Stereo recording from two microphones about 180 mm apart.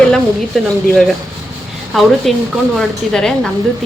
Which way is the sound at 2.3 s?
Centre (ahead or behind).